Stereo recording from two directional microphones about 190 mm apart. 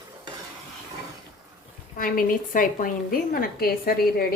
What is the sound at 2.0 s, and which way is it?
A woman's voice, 45° left (ahead or behind).